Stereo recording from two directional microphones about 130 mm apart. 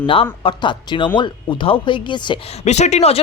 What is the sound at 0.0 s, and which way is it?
Speech, 45° left (ahead or behind).